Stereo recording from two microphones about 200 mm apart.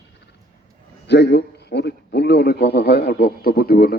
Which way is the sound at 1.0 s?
55° left (ahead or behind).